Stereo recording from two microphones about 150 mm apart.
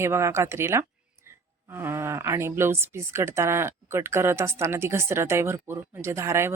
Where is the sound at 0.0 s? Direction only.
20° right (ahead or behind).